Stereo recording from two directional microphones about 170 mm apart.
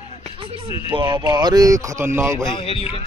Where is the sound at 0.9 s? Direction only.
25° right (ahead or behind).